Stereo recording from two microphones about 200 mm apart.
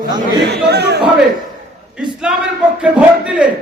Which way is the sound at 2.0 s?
5° right (ahead or behind).